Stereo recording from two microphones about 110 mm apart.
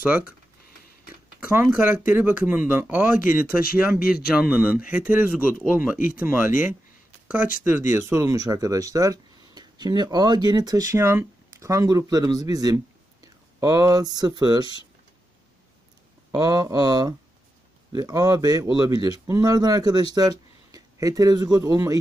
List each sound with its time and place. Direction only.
1.4 s speech: 15° right (ahead or behind); by 14.8 s 40° right (ahead or behind)
16.3 s speech: 35° right (ahead or behind)